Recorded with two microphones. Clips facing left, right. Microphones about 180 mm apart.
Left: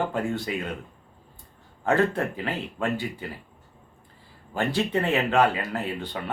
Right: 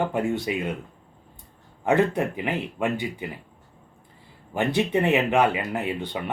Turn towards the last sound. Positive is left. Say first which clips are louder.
# right 2 dB
turn(degrees=-20)  # may be behind; listen again after turning